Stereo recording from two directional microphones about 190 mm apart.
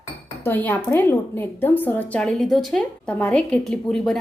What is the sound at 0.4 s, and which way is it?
A woman's voice, 10° left (ahead or behind).